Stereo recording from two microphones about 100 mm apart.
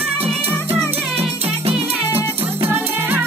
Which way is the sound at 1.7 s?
75° right (ahead or behind).